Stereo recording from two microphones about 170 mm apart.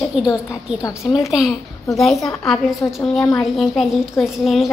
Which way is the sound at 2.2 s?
Centre (ahead or behind).